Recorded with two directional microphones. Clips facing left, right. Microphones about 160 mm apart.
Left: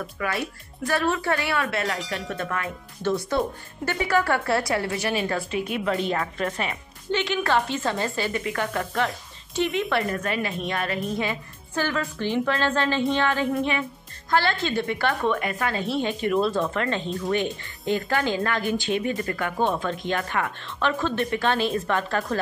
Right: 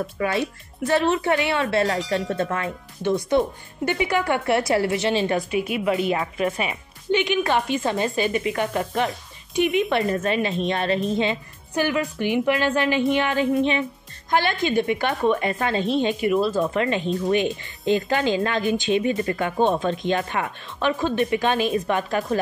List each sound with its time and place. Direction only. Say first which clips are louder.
0.0 s speech: right 5 dB; 25° right (ahead or behind)
2.0 s speech: right 7 dB; centre (ahead or behind)
2.3 s speech: right 4 dB; 25° right (ahead or behind)
5.5 s speech: right 3 dB; 5° right (ahead or behind)
16.2 s speech: right 2 dB; 5° right (ahead or behind)
16.7 s speech: right 4 dB; 15° right (ahead or behind)